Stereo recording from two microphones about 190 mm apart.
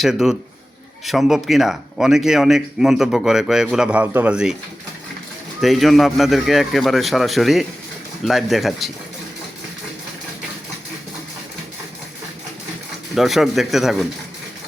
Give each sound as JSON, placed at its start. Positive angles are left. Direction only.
{"t": 0.0, "sound": "speech", "side_deg": 0}
{"t": 5.5, "sound": "speech", "side_deg": 0}
{"t": 13.1, "sound": "speech", "side_deg": 0}